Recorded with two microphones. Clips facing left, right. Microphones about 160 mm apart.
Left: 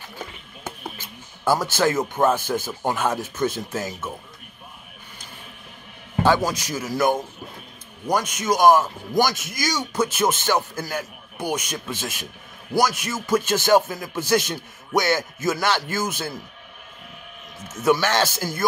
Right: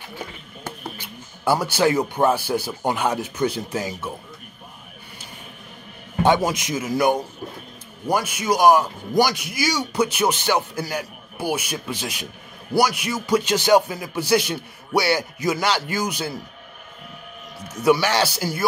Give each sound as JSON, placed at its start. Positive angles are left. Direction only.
{"t": 1.4, "sound": "a man's voice", "side_deg": -15}
{"t": 6.2, "sound": "a man's voice", "side_deg": -20}
{"t": 17.6, "sound": "a man's voice", "side_deg": -10}